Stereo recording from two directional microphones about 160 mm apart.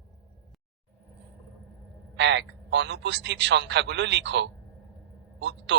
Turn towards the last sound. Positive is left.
turn(degrees=-90)